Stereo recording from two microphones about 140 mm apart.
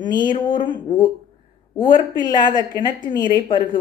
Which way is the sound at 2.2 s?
30° left (ahead or behind).